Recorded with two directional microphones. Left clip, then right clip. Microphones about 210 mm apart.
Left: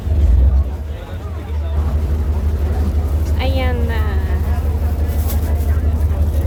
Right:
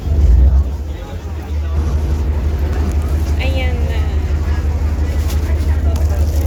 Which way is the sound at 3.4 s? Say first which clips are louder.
Left 2 dB; 25° left (ahead or behind).